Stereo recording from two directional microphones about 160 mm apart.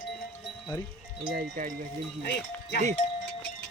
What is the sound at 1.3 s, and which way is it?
Speech, 65° right (ahead or behind).